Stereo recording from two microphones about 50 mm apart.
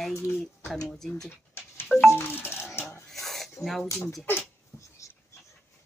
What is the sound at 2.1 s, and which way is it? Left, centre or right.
Music, left.